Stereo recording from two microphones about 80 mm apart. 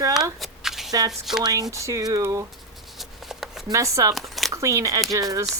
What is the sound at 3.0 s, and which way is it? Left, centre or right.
Shuffling cards, centre.